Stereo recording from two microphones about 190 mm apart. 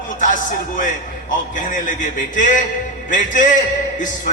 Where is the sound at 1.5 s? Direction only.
40° left (ahead or behind).